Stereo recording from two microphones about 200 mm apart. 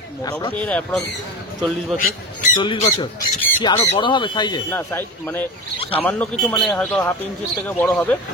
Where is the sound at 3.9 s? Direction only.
25° left (ahead or behind).